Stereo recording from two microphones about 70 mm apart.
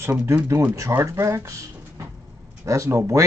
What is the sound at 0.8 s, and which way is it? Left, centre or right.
Speech, right.